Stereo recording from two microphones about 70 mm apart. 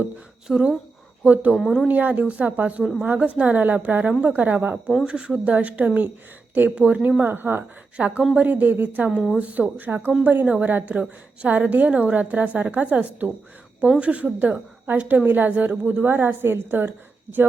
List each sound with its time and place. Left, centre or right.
0.4 s speech: centre
1.2 s a woman's voice: right
1.5 s a woman's voice: centre
1.9 s a woman's voice: right
13.8 s speech: centre
14.1 s a woman's voice: centre